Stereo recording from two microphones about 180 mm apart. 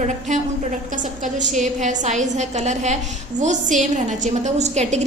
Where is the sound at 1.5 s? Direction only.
40° right (ahead or behind).